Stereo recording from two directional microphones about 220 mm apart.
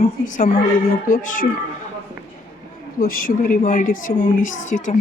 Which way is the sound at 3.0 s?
40° left (ahead or behind).